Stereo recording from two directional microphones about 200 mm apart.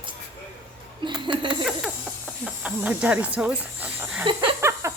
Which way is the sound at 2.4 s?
5° right (ahead or behind).